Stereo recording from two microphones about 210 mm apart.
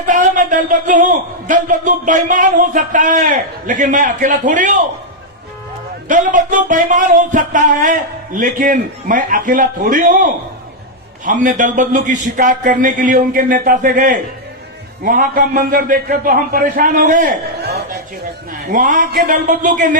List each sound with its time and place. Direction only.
0.1 s a man's voice: 40° right (ahead or behind)
6.1 s a man's voice: 40° right (ahead or behind)
18.6 s a man's voice: 40° right (ahead or behind)